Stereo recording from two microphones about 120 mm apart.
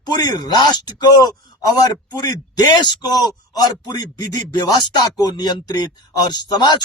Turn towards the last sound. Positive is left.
turn(degrees=35)  # may be behind; listen again after turning